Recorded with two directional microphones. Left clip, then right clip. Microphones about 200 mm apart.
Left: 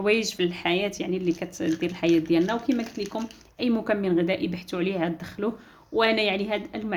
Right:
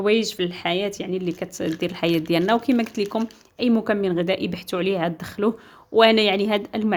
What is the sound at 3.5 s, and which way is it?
Speech, 25° right (ahead or behind).